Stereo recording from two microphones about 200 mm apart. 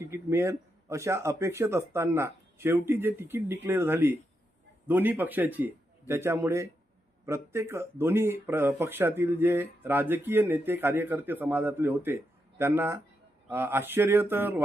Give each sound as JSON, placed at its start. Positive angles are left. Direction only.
{"t": 0.1, "sound": "speech", "side_deg": -15}